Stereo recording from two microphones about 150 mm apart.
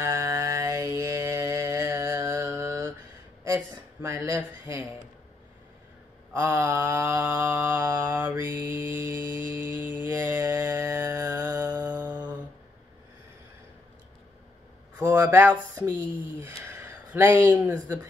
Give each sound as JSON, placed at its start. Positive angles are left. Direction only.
{"t": 0.0, "sound": "mantra", "side_deg": -15}
{"t": 3.4, "sound": "speech", "side_deg": -20}
{"t": 6.3, "sound": "mantra", "side_deg": -15}
{"t": 15.0, "sound": "speech", "side_deg": -15}